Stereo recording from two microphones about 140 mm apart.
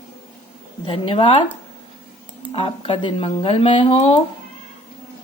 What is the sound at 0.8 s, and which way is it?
Speech, 40° left (ahead or behind).